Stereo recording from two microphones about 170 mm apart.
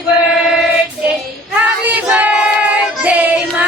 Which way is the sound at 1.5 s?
10° right (ahead or behind).